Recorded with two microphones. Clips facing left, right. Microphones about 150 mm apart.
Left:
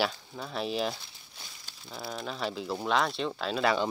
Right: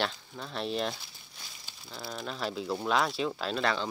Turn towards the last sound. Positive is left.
turn(degrees=5)  # may be behind; listen again after turning